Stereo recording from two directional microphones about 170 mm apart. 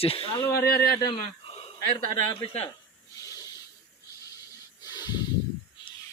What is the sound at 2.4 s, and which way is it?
Speech, 35° left (ahead or behind).